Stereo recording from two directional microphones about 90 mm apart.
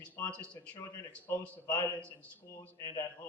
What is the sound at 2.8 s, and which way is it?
Speech, 30° left (ahead or behind).